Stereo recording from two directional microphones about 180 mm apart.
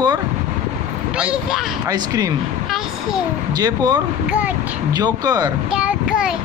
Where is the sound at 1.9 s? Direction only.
20° right (ahead or behind).